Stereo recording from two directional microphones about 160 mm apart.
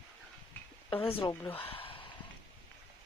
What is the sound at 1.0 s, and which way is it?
Speech, 35° left (ahead or behind).